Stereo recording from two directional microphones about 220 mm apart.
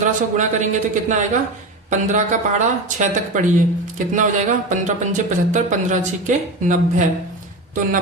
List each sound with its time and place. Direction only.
0.0 s speech: 35° right (ahead or behind)